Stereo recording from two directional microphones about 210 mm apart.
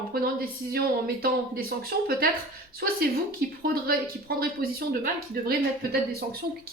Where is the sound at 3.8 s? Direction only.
45° right (ahead or behind).